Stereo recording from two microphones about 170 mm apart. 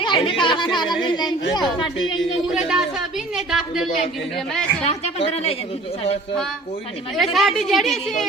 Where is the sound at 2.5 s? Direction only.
5° right (ahead or behind).